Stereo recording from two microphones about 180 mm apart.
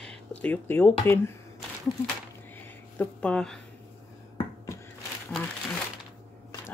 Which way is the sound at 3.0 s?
5° left (ahead or behind).